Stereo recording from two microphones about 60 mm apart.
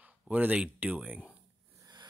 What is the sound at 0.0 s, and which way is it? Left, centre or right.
Speech, right.